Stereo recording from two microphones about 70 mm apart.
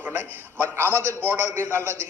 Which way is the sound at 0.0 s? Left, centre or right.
Right.